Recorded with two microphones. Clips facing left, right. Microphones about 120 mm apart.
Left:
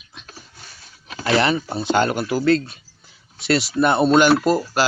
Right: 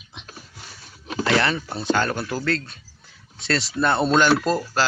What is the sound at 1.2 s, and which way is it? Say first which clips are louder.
Speech: left 3 dB; 15° left (ahead or behind).